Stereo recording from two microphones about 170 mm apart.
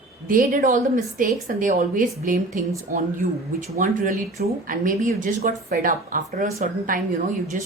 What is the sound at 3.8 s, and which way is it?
Speech, 50° right (ahead or behind).